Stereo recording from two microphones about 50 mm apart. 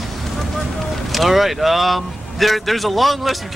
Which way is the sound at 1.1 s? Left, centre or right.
Centre.